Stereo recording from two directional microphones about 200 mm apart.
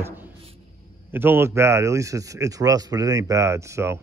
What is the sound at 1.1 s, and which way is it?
A man's voice, 10° right (ahead or behind).